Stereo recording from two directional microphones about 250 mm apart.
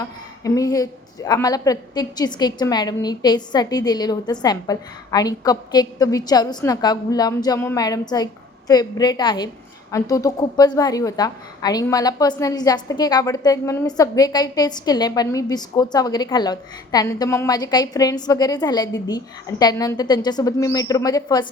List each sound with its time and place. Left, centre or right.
0.0 s a woman's voice: centre